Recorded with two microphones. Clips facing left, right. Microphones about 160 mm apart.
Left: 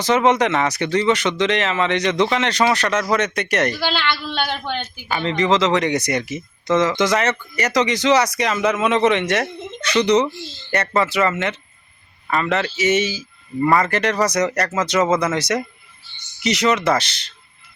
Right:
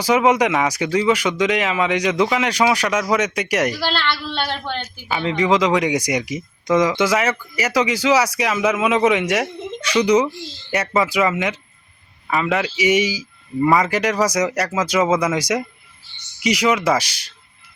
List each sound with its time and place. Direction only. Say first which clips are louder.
0.0 s a woman's voice: even; 10° right (ahead or behind)